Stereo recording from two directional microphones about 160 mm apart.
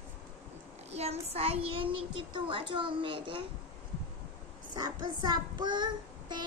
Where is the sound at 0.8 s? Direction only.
40° right (ahead or behind).